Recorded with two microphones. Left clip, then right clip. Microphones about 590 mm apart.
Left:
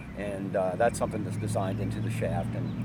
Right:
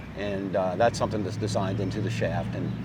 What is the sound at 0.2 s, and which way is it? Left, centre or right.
Speech, right.